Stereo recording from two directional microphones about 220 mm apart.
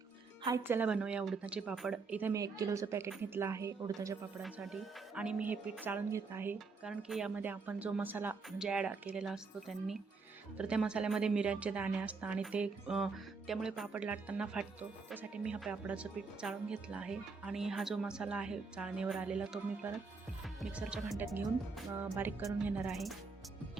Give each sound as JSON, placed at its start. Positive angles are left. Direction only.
{"t": 0.4, "sound": "speech", "side_deg": -10}
{"t": 4.4, "sound": "speech", "side_deg": 0}